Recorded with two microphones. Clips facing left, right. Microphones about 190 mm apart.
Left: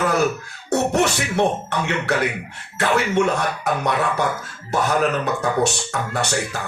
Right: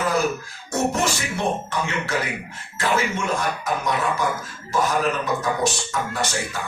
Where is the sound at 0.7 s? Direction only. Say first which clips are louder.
Left 4 dB; 65° left (ahead or behind).